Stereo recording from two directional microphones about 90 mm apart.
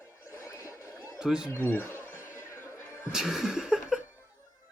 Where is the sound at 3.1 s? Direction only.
5° right (ahead or behind).